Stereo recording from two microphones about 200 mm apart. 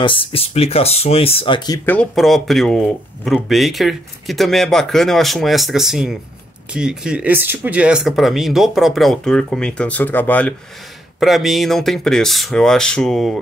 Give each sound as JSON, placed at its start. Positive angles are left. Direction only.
{"t": 0.0, "sound": "speech", "side_deg": 25}
{"t": 1.9, "sound": "speech", "side_deg": 5}